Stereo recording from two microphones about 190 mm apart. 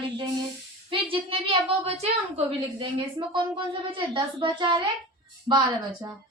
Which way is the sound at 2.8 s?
25° right (ahead or behind).